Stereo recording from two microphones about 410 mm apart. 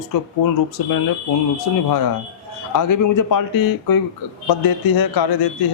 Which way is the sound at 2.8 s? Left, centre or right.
Left.